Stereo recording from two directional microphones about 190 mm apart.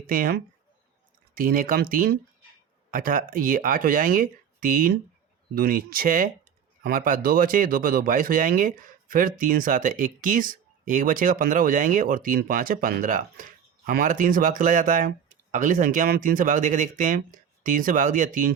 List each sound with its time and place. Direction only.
0.1 s speech: 50° right (ahead or behind)